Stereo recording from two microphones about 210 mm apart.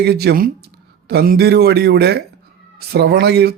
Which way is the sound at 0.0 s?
50° right (ahead or behind).